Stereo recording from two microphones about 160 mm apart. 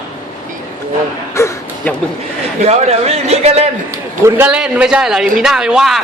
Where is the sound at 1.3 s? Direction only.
15° left (ahead or behind).